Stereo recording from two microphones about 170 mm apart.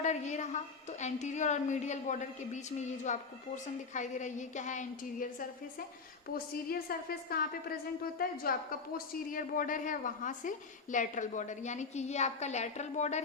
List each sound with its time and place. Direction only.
0.0 s a woman's voice: 45° left (ahead or behind)
6.2 s a woman's voice: 60° left (ahead or behind); by 13.2 s 45° left (ahead or behind)